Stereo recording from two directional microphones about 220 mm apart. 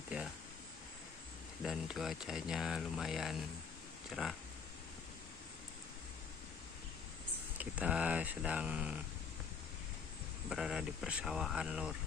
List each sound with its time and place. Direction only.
1.6 s speech: centre (ahead or behind)
7.6 s speech: 5° right (ahead or behind)
10.5 s speech: centre (ahead or behind)